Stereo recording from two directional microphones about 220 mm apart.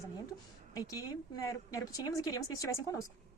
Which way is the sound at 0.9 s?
15° left (ahead or behind).